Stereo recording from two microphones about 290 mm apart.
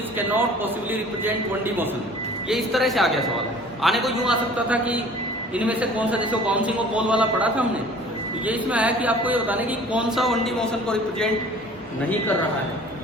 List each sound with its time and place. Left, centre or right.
0.2 s a man's voice: centre